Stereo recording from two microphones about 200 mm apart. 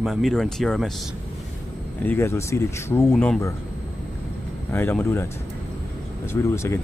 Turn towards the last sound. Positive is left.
turn(degrees=15)  # may be behind; listen again after turning